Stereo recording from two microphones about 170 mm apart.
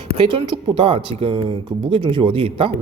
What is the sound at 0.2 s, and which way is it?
Speech, 30° right (ahead or behind).